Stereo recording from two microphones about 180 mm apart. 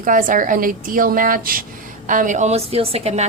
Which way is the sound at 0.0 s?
50° right (ahead or behind).